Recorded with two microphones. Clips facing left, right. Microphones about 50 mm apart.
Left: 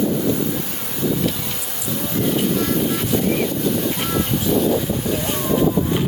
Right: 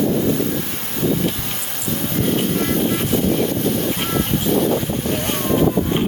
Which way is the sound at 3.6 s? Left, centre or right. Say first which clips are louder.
Right 1 dB; right.